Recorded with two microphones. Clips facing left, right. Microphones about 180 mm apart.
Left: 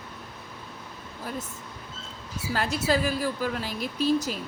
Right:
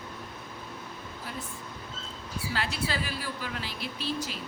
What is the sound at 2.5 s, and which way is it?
Speech, 45° left (ahead or behind).